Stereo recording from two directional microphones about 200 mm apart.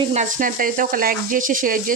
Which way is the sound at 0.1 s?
40° right (ahead or behind).